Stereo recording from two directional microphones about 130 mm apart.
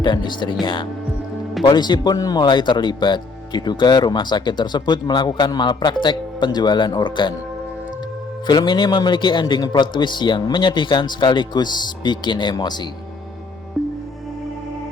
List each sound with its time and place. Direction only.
0.0 s speech: 35° left (ahead or behind)
8.4 s speech: 35° left (ahead or behind)